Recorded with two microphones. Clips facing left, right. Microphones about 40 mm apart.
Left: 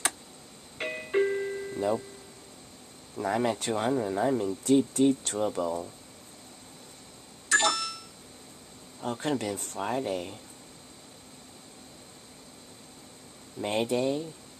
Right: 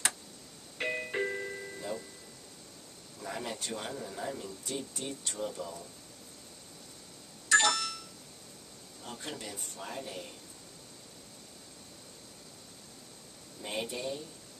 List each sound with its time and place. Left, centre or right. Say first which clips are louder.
0.7 s music: left 5 dB; centre
3.2 s speech: left 11 dB; left
7.4 s a sound: left 1 dB; centre
9.0 s speech: left 12 dB; left
13.6 s speech: left 9 dB; left